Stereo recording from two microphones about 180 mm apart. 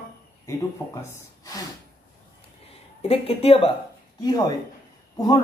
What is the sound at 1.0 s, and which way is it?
Speech, 15° left (ahead or behind).